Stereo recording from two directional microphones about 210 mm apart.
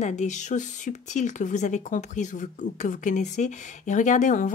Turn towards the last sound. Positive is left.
turn(degrees=35)  # may be behind; listen again after turning